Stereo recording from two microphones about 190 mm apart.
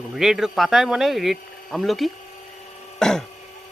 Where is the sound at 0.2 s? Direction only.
Centre (ahead or behind).